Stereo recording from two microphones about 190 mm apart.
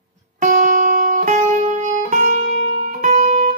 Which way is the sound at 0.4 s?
45° right (ahead or behind).